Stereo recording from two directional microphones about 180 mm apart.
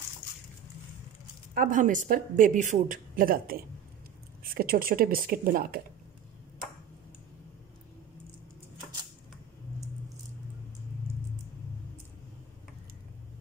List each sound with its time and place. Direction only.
1.5 s speech: 50° right (ahead or behind)